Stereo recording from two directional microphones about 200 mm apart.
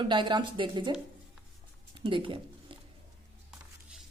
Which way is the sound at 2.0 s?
25° right (ahead or behind).